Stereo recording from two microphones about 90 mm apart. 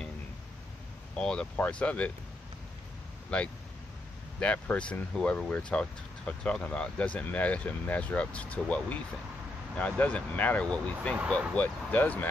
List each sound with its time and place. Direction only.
1.1 s speech: 10° left (ahead or behind)
3.3 s speech: 15° left (ahead or behind)